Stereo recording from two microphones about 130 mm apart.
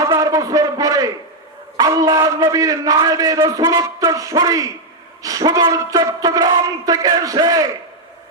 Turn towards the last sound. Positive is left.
turn(degrees=-30)  # may be behind; listen again after turning